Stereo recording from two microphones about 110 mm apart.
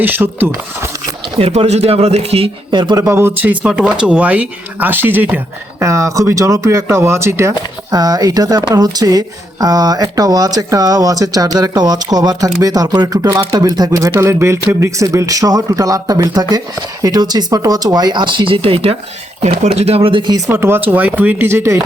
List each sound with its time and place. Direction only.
0.0 s speech: 15° right (ahead or behind)
1.4 s speech: 75° right (ahead or behind)
2.7 s speech: 45° right (ahead or behind)
3.0 s speech: 25° right (ahead or behind)
3.6 s speech: 5° right (ahead or behind)
5.8 s speech: 30° right (ahead or behind)
14.1 s speech: 25° right (ahead or behind); by 18.9 s 60° right (ahead or behind)
19.4 s speech: 75° right (ahead or behind); by 20.3 s 50° right (ahead or behind)
20.5 s speech: 20° right (ahead or behind)